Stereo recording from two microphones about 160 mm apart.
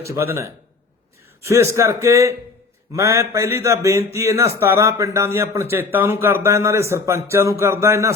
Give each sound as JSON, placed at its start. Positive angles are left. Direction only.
{"t": 0.0, "sound": "a man's voice", "side_deg": -15}
{"t": 1.7, "sound": "a man's voice", "side_deg": -15}